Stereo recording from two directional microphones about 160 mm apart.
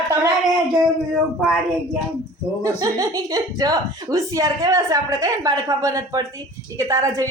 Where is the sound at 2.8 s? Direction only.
20° right (ahead or behind).